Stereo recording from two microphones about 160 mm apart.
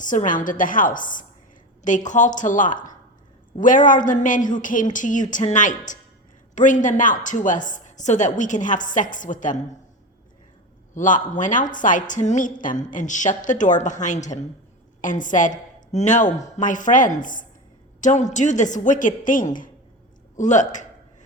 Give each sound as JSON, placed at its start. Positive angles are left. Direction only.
{"t": 0.0, "sound": "a woman's voice", "side_deg": 55}
{"t": 10.9, "sound": "a woman's voice", "side_deg": 55}